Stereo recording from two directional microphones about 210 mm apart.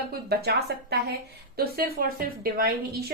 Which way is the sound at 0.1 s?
50° right (ahead or behind).